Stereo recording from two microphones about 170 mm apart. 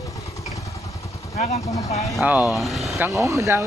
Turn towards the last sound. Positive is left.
turn(degrees=-20)  # may be behind; listen again after turning